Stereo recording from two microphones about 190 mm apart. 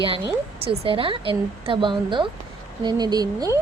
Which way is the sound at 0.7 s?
30° right (ahead or behind).